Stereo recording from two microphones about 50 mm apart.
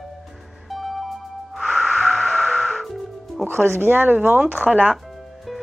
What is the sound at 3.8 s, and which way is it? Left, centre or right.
Speech, right.